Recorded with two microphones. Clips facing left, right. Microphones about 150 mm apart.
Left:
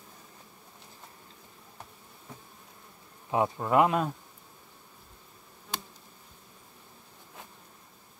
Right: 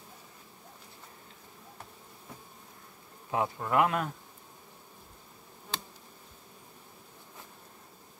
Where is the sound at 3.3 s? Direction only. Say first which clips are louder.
Left 3 dB; 20° left (ahead or behind).